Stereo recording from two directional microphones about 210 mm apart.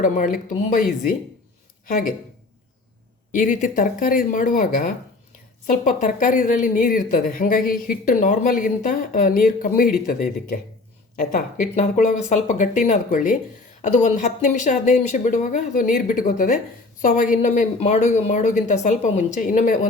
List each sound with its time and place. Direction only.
0.0 s speech: 40° left (ahead or behind)
1.9 s speech: 40° left (ahead or behind)
3.3 s speech: 35° left (ahead or behind)